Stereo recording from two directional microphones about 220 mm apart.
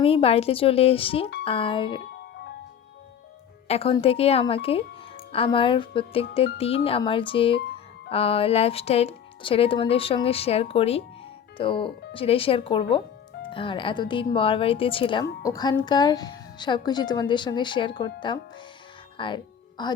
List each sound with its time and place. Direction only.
0.0 s speech: 25° left (ahead or behind)
3.7 s speech: 25° left (ahead or behind)
19.1 s music: 20° left (ahead or behind)